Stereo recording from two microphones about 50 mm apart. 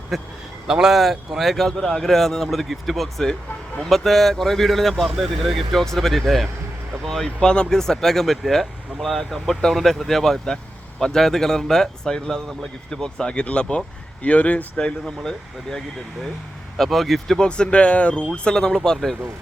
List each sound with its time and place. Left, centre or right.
0.1 s speech: centre
7.3 s speech: centre
15.0 s speech: centre
17.4 s speech: left
18.3 s speech: centre